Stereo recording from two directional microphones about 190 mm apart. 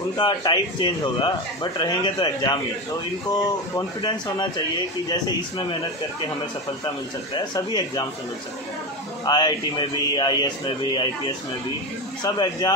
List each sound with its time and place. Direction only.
0.2 s speech: 25° left (ahead or behind)
7.3 s speech: 25° left (ahead or behind)
9.2 s speech: 20° left (ahead or behind)